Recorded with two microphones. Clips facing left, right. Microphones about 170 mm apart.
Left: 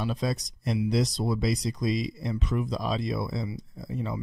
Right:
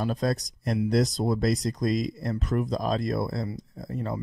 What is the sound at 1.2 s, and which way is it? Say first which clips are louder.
Speech: right 3 dB; 50° right (ahead or behind).